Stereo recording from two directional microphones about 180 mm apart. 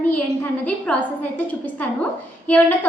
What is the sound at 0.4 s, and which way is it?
A woman's voice, 10° left (ahead or behind).